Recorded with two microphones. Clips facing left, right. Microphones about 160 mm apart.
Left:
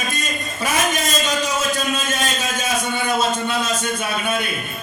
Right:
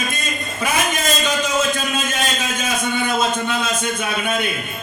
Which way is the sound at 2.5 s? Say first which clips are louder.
Right 2 dB; 40° left (ahead or behind).